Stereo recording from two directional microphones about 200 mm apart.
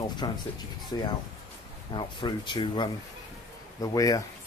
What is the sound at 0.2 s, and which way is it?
Speech, 20° left (ahead or behind).